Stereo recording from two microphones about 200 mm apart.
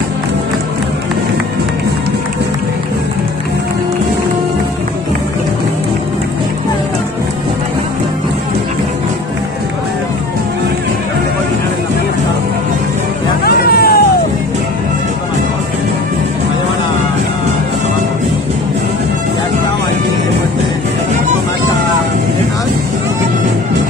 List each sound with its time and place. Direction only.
13.4 s hubbub: 50° left (ahead or behind)